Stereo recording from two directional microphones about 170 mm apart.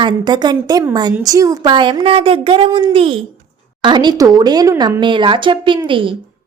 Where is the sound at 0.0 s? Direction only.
25° right (ahead or behind).